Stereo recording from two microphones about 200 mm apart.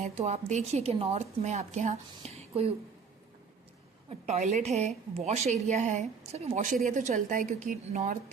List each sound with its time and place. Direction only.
0.0 s a woman's voice: 35° right (ahead or behind)
4.3 s a woman's voice: 35° right (ahead or behind)